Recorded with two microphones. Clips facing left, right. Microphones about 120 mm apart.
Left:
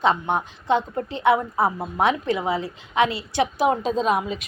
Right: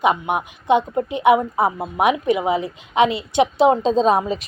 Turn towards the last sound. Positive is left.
turn(degrees=-35)  # may be behind; listen again after turning